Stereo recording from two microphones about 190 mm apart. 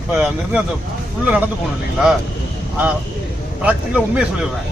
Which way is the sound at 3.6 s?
5° right (ahead or behind).